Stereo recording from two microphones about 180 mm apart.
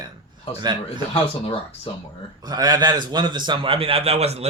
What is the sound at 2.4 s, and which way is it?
A man's voice, 20° right (ahead or behind).